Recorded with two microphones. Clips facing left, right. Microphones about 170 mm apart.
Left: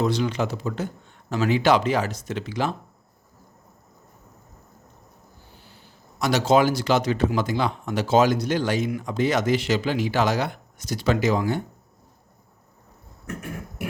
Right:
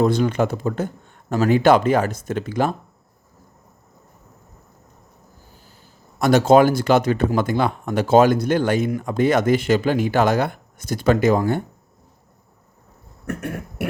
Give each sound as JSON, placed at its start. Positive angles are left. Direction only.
{"t": 0.0, "sound": "speech", "side_deg": -50}
{"t": 5.5, "sound": "speech", "side_deg": -45}
{"t": 13.2, "sound": "cough", "side_deg": -65}